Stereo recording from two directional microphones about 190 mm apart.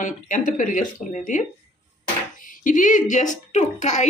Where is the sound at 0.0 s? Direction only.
45° left (ahead or behind).